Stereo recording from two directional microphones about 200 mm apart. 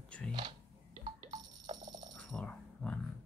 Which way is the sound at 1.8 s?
20° right (ahead or behind).